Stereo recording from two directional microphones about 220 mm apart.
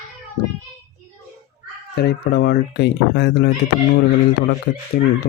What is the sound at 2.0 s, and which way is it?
Speech, 45° left (ahead or behind).